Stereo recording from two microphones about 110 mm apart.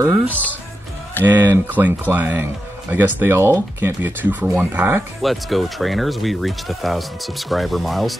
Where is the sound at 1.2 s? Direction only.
15° right (ahead or behind).